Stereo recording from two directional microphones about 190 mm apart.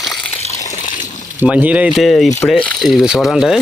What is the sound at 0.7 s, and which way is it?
Water, 40° left (ahead or behind).